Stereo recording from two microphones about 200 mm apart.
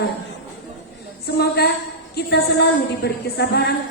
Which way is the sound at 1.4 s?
55° left (ahead or behind).